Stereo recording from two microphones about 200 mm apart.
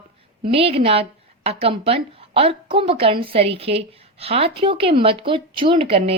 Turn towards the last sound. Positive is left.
turn(degrees=-30)  # may be behind; listen again after turning